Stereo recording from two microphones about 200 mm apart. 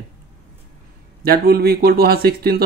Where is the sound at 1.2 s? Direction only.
50° right (ahead or behind).